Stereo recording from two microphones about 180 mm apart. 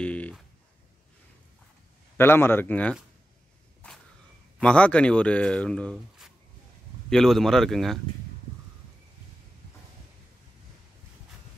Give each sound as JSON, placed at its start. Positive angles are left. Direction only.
{"t": 0.0, "sound": "a sound", "side_deg": 5}
{"t": 2.1, "sound": "a man's voice", "side_deg": 15}
{"t": 3.8, "sound": "whip", "side_deg": 5}
{"t": 4.6, "sound": "speech", "side_deg": 5}